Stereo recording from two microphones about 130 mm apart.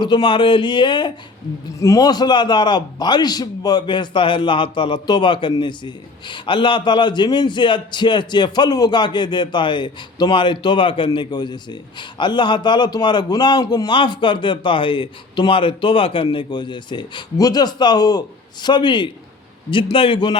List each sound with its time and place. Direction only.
0.0 s a man's voice: 35° left (ahead or behind)